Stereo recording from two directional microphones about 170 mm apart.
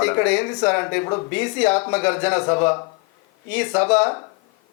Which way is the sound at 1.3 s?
10° left (ahead or behind).